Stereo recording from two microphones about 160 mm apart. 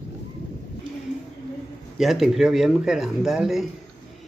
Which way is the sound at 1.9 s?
Centre (ahead or behind).